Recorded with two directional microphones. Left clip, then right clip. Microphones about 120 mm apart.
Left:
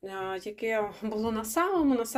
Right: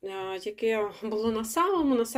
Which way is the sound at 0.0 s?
5° right (ahead or behind).